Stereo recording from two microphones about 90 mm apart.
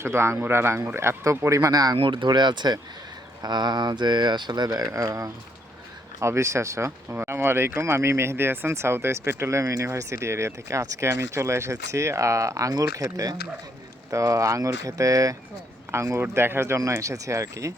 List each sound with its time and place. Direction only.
0.0 s speech: 30° right (ahead or behind); by 2.0 s 45° right (ahead or behind)
2.0 s speech: 65° right (ahead or behind); by 17.7 s 35° right (ahead or behind)